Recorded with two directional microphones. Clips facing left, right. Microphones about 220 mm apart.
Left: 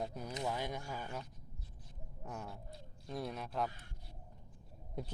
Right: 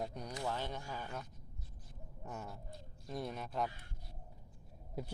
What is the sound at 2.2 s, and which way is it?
Speech, centre (ahead or behind).